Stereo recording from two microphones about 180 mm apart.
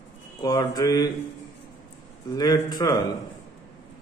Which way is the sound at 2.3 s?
20° left (ahead or behind).